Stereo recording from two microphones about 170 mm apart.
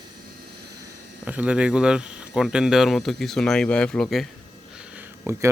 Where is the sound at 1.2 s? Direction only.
10° right (ahead or behind).